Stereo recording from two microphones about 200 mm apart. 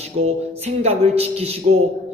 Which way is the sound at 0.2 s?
35° right (ahead or behind).